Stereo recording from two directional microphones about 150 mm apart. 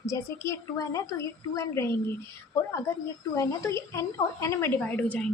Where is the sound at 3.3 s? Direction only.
20° left (ahead or behind).